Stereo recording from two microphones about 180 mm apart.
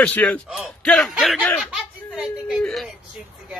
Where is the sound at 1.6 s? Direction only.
5° right (ahead or behind).